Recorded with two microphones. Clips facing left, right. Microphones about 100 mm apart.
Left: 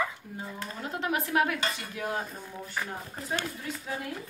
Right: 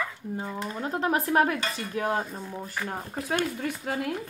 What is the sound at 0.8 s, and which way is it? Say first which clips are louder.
Speech: right 4 dB; 35° right (ahead or behind).